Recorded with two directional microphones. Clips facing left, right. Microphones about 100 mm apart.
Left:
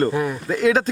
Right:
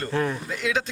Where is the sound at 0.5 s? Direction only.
40° left (ahead or behind).